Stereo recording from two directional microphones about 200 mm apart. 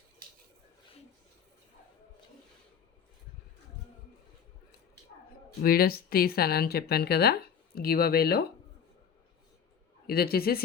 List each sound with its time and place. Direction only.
5.6 s speech: 50° left (ahead or behind)
10.1 s speech: 50° left (ahead or behind)